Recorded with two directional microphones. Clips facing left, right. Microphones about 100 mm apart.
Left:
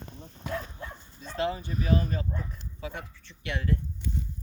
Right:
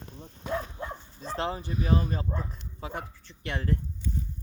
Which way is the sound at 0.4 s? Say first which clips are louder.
Right 3 dB; 25° right (ahead or behind).